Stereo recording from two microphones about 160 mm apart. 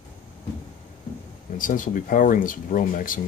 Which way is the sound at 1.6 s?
55° left (ahead or behind).